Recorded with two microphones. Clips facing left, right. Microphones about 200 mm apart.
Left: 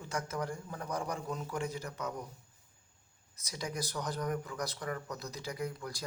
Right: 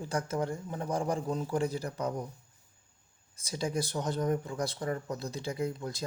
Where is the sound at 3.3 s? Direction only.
30° right (ahead or behind).